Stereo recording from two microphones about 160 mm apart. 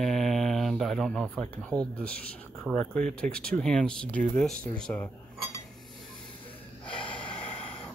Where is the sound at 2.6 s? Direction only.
5° left (ahead or behind).